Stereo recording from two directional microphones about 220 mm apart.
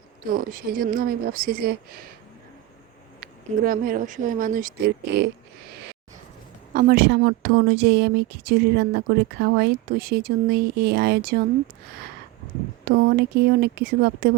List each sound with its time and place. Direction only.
0.3 s speech: 40° right (ahead or behind)
3.2 s speech: 40° right (ahead or behind)
6.7 s speech: 45° right (ahead or behind)
12.8 s speech: 50° right (ahead or behind)